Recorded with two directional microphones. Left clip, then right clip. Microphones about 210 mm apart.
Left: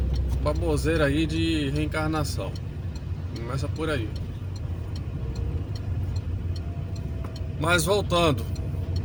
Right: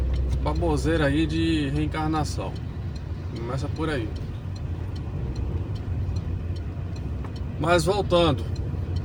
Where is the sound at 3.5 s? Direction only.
20° left (ahead or behind).